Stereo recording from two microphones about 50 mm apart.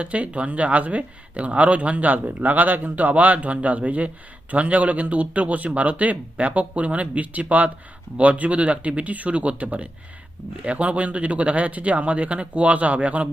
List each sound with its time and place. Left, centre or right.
0.0 s speech: right